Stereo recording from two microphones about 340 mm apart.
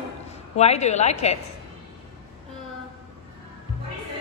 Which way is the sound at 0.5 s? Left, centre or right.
Centre.